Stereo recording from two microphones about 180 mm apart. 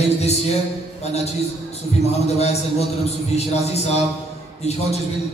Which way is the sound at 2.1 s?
35° left (ahead or behind).